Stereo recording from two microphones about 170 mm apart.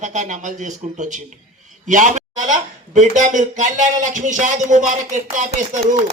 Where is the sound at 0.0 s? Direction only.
45° right (ahead or behind).